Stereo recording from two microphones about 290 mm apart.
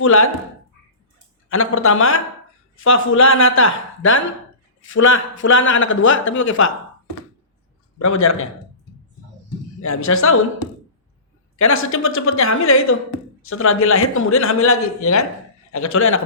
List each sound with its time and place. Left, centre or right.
0.0 s a woman's voice: left
1.5 s a woman's voice: left
7.9 s a woman's voice: left
9.8 s a woman's voice: left
11.5 s a woman's voice: left